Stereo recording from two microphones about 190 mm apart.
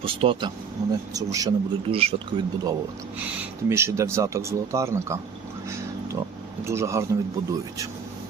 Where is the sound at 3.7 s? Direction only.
15° right (ahead or behind).